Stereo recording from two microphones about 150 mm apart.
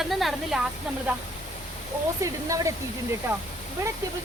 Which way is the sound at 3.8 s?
20° right (ahead or behind).